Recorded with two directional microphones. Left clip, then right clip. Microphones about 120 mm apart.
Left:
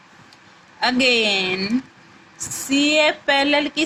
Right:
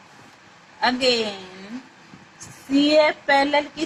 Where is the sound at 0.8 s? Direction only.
10° left (ahead or behind).